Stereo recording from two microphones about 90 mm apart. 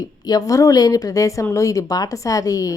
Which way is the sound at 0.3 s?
40° left (ahead or behind).